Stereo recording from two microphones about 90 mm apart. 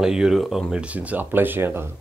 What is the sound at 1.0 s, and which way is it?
Speech, 20° right (ahead or behind).